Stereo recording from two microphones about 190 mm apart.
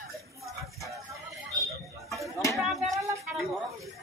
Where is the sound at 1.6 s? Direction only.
Centre (ahead or behind).